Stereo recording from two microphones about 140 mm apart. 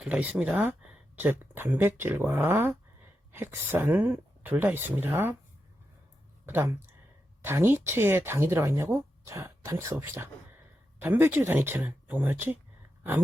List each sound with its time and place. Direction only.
0.0 s speech: 10° right (ahead or behind)
6.4 s speech: 15° right (ahead or behind)
13.0 s a sound: 15° right (ahead or behind)